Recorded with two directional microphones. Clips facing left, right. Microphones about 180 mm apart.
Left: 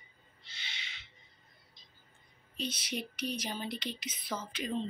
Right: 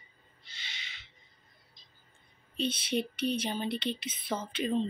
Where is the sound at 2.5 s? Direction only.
30° right (ahead or behind).